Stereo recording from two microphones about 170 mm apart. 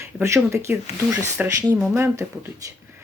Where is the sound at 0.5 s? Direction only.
15° right (ahead or behind).